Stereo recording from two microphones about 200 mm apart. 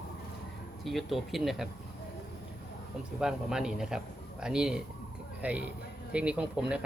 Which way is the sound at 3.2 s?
5° right (ahead or behind).